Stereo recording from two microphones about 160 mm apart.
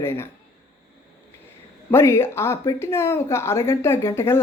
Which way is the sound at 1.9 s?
15° left (ahead or behind).